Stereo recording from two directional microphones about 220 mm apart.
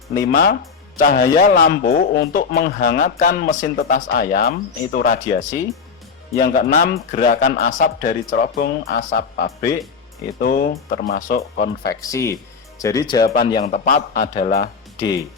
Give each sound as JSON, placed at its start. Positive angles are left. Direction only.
{"t": 0.2, "sound": "a man's voice", "side_deg": 45}
{"t": 11.9, "sound": "a man's voice", "side_deg": 15}
{"t": 13.7, "sound": "a man's voice", "side_deg": 35}
{"t": 14.4, "sound": "music", "side_deg": 45}